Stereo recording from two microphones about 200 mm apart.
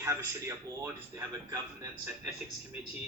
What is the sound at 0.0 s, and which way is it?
Speech, 15° right (ahead or behind).